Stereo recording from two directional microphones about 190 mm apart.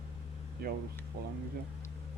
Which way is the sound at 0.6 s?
55° right (ahead or behind).